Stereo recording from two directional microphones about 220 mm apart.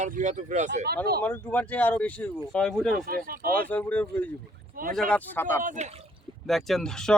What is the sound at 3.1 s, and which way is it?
Speech, 40° right (ahead or behind).